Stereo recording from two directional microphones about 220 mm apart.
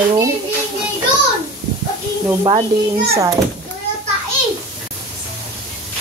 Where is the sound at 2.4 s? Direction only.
25° right (ahead or behind).